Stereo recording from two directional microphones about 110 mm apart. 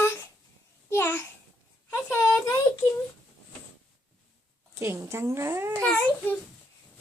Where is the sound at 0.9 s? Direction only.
15° left (ahead or behind).